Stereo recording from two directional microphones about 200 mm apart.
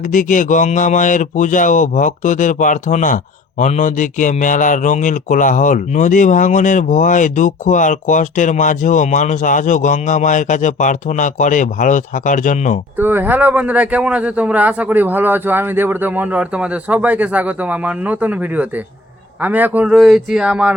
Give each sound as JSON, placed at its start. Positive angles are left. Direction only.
{"t": 0.1, "sound": "speech", "side_deg": 40}
{"t": 13.0, "sound": "a man's voice", "side_deg": -10}